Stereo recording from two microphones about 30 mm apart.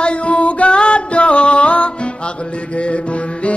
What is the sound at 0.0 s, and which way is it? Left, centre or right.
Music, left.